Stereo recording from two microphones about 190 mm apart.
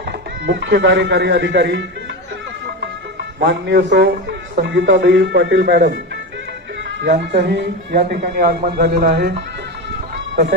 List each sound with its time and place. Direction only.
0.4 s speech: 65° right (ahead or behind)
3.4 s speech: 70° right (ahead or behind)
4.6 s speech: 75° right (ahead or behind)
7.0 s speech: 65° right (ahead or behind)
8.2 s speech: 50° right (ahead or behind)